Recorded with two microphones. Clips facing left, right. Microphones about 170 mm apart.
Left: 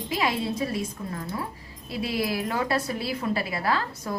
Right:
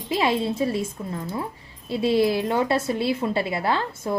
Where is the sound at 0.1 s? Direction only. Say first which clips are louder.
Right 5 dB; 25° right (ahead or behind).